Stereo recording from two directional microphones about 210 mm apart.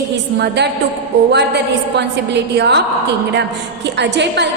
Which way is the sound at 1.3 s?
55° right (ahead or behind).